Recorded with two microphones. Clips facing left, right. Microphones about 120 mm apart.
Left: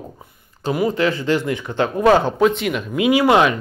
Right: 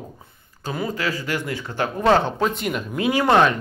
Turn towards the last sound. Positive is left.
turn(degrees=10)  # may be behind; listen again after turning